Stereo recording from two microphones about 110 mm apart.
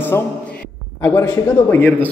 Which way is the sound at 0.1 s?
25° left (ahead or behind).